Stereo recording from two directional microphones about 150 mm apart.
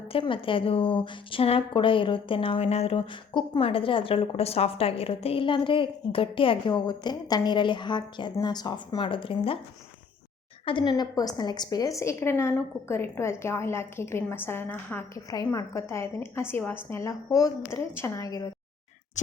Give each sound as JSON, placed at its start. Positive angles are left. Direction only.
{"t": 0.1, "sound": "a woman's voice", "side_deg": 35}
{"t": 10.7, "sound": "a woman's voice", "side_deg": 30}